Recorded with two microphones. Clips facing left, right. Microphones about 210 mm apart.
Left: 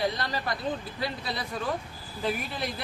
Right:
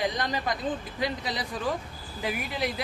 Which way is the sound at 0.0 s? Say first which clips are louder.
Right 1 dB; 15° right (ahead or behind).